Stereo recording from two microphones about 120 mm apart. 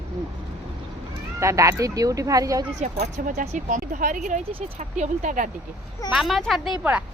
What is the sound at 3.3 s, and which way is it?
Speech, 80° right.